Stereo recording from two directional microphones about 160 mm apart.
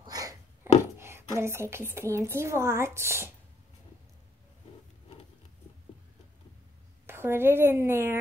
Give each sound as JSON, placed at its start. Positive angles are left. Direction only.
{"t": 0.0, "sound": "a sound", "side_deg": -25}
{"t": 0.9, "sound": "a woman's voice", "side_deg": -15}
{"t": 7.1, "sound": "a woman's voice", "side_deg": -15}